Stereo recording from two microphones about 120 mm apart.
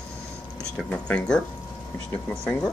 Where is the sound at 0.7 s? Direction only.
10° left (ahead or behind).